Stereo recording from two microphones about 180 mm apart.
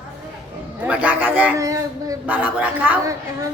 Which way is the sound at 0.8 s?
10° right (ahead or behind).